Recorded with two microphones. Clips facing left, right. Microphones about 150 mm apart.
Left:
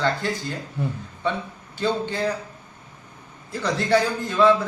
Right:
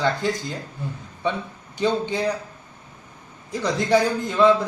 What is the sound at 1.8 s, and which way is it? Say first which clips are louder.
Speech: right 2 dB; 15° right (ahead or behind).